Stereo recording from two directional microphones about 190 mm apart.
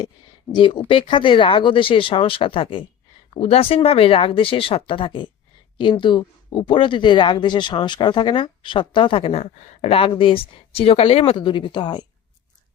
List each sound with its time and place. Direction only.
0.5 s speech: 25° left (ahead or behind)